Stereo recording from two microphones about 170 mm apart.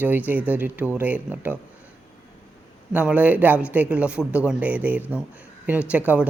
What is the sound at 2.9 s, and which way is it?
Speech, 5° right (ahead or behind).